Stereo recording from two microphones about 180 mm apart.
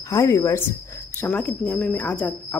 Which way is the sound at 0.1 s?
20° left (ahead or behind).